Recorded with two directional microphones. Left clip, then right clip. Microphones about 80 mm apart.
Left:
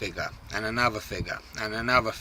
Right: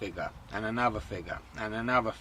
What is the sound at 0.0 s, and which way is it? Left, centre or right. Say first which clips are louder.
Speech: left 4 dB; centre.